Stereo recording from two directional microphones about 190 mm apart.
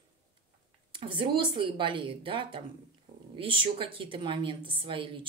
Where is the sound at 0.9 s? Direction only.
25° right (ahead or behind).